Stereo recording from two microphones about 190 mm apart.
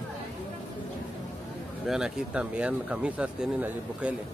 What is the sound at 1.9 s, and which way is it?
Speech, 5° right (ahead or behind).